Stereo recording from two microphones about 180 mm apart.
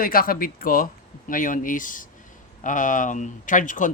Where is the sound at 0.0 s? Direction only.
55° left (ahead or behind).